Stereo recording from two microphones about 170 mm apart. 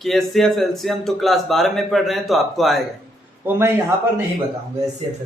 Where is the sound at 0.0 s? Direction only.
Centre (ahead or behind).